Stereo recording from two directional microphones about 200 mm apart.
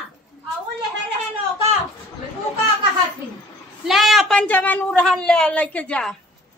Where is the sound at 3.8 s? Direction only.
Centre (ahead or behind).